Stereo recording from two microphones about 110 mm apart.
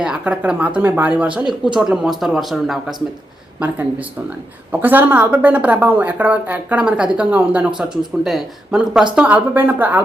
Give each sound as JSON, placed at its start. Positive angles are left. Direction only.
{"t": 0.0, "sound": "speech", "side_deg": -10}
{"t": 1.3, "sound": "speech", "side_deg": -45}
{"t": 1.7, "sound": "speech", "side_deg": -5}
{"t": 3.6, "sound": "speech", "side_deg": -10}